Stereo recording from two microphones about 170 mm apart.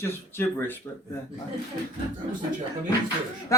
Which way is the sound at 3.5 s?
20° left (ahead or behind).